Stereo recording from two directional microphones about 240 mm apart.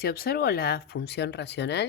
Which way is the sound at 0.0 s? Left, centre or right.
Left.